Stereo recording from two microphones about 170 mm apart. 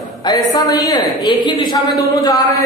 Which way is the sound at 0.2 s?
25° left (ahead or behind).